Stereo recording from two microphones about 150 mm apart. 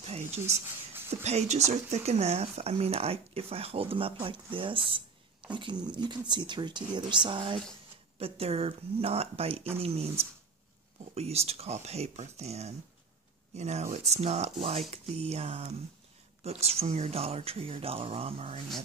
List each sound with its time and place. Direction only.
0.1 s a sound: 45° right (ahead or behind)
0.4 s speech: 20° right (ahead or behind)
1.2 s speech: 45° right (ahead or behind)